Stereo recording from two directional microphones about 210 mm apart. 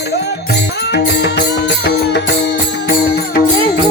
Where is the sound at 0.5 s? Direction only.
55° left (ahead or behind).